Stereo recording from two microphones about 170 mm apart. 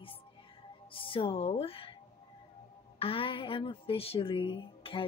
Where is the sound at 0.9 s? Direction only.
30° left (ahead or behind).